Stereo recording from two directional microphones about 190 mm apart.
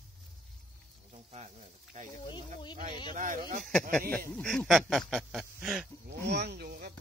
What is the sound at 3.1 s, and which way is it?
Speech, 45° right (ahead or behind).